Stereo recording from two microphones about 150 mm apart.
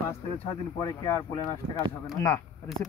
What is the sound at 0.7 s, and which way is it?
Speech, 20° left (ahead or behind).